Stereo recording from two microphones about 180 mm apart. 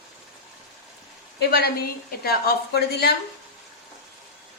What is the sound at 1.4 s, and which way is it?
A woman's voice, 65° left (ahead or behind).